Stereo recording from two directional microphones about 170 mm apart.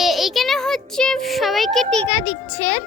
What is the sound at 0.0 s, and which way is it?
Child singing, centre (ahead or behind).